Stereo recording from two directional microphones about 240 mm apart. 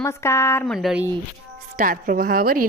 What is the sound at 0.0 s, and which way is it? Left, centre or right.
Speech, centre.